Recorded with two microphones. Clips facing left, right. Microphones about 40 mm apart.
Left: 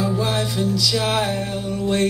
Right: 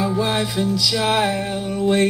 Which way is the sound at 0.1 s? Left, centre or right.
Centre.